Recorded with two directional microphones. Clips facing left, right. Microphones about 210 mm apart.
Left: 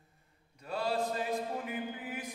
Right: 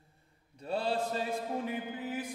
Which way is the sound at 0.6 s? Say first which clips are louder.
Right 1 dB; 30° right (ahead or behind).